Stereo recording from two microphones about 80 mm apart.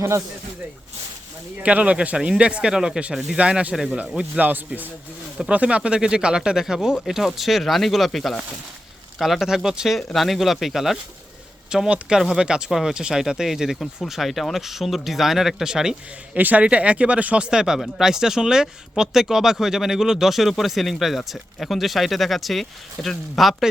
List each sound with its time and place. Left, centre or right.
1.6 s speech: centre
16.4 s speech: centre